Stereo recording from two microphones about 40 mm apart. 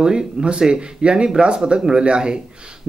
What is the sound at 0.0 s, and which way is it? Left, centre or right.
Speech, centre.